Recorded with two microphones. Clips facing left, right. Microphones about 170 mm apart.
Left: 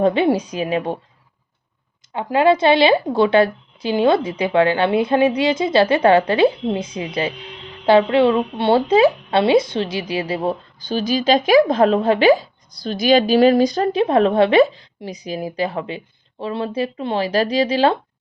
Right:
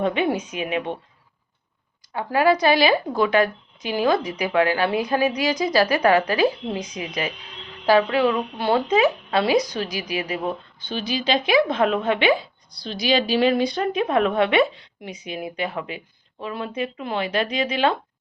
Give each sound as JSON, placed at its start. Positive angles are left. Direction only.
{"t": 0.0, "sound": "a woman's voice", "side_deg": 30}
{"t": 2.1, "sound": "a woman's voice", "side_deg": 25}